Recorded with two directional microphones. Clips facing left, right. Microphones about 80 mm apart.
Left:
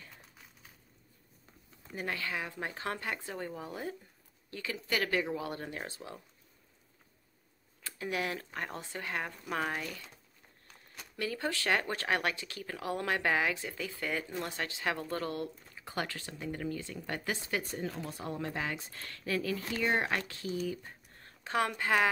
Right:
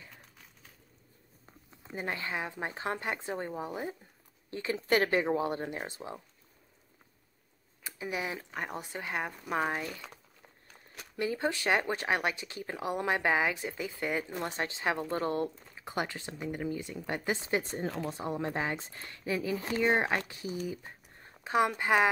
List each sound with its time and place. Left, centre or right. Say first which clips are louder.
1.8 s speech: right 1 dB; right
7.8 s speech: even; centre
11.1 s speech: right 4 dB; right